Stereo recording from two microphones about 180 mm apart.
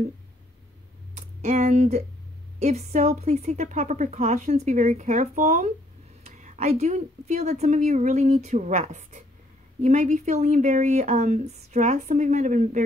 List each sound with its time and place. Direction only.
1.1 s a woman's voice: 40° right (ahead or behind)